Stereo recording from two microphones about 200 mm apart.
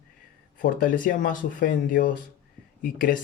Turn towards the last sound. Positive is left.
turn(degrees=45)  # may be behind; listen again after turning